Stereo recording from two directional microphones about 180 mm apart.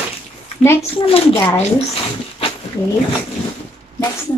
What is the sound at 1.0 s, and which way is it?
Speech, 30° left (ahead or behind).